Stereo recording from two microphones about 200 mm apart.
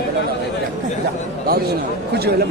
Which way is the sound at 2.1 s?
55° right (ahead or behind).